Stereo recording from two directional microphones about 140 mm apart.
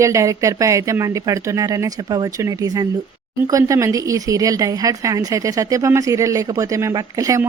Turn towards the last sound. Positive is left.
turn(degrees=-25)  # may be behind; listen again after turning